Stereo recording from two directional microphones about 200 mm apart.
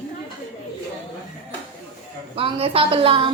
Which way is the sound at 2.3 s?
30° right (ahead or behind).